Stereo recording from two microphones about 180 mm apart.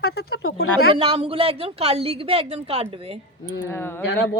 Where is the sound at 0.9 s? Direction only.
30° right (ahead or behind).